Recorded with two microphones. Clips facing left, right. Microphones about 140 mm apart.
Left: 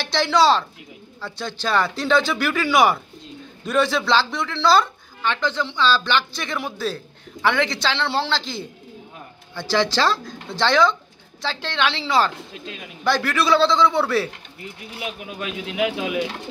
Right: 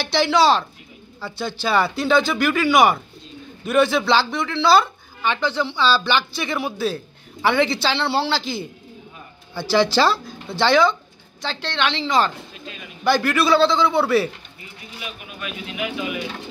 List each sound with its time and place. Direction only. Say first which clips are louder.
0.0 s a man's voice: right 1 dB; 5° right (ahead or behind)
11.4 s speech: even; 5° left (ahead or behind)
15.0 s speech: left 4 dB; 90° left